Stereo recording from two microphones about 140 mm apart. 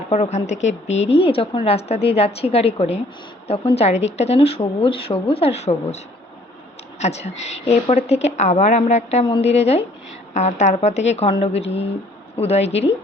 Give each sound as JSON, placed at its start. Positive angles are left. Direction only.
{"t": 0.1, "sound": "a woman's voice", "side_deg": 50}
{"t": 7.0, "sound": "a woman's voice", "side_deg": 50}